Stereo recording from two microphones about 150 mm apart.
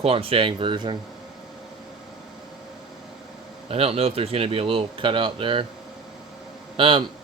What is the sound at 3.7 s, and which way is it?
Speech, 40° right (ahead or behind).